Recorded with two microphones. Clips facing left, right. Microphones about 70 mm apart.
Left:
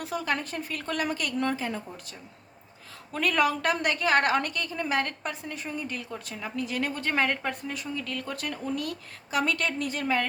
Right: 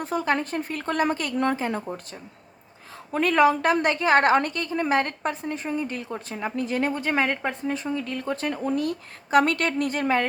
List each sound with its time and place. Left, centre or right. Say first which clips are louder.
0.0 s a woman's voice: right 5 dB; right
3.1 s a woman's voice: right 6 dB; right
7.0 s a woman's voice: right 3 dB; centre
7.7 s a woman's voice: right 6 dB; right
9.4 s a woman's voice: right 5 dB; right